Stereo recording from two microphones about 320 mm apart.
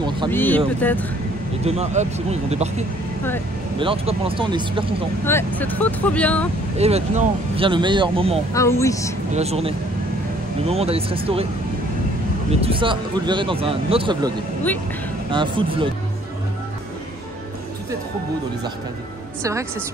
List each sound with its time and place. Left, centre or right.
0.3 s speech: centre
1.6 s speech: centre
3.8 s speech: centre
5.2 s speech: centre
6.8 s speech: centre
8.5 s speech: centre
9.3 s speech: centre
12.4 s speech: centre
15.3 s speech: centre